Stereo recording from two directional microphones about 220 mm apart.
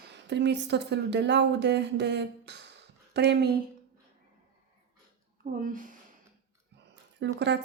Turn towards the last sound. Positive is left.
turn(degrees=-50)  # may be behind; listen again after turning